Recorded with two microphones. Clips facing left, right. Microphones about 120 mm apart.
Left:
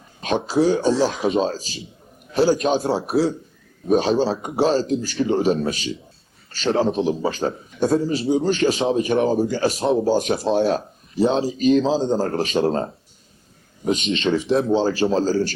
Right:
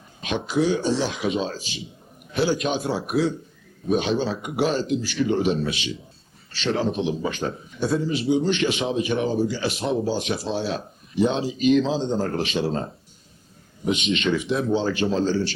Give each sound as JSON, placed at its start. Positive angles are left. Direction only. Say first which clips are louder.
{"t": 0.2, "sound": "a man's voice", "louder": "left 4 dB", "side_deg": 35}
{"t": 14.1, "sound": "a man's voice", "louder": "left 4 dB", "side_deg": 30}